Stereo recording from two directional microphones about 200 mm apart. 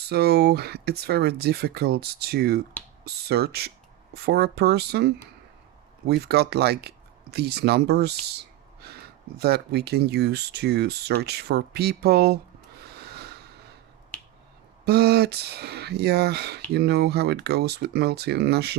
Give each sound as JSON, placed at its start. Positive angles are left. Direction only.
{"t": 0.1, "sound": "speech", "side_deg": -55}
{"t": 8.4, "sound": "whispering", "side_deg": -55}
{"t": 9.4, "sound": "speech", "side_deg": -55}
{"t": 13.0, "sound": "a sound", "side_deg": -55}
{"t": 14.8, "sound": "speech", "side_deg": -55}